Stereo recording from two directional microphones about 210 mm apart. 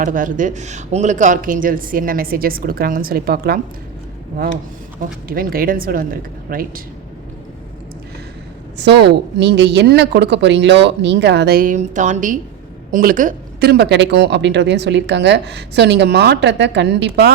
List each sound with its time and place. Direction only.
0.0 s speech: 40° right (ahead or behind)
4.9 s speech: 45° right (ahead or behind)
8.8 s a woman's voice: 55° right (ahead or behind)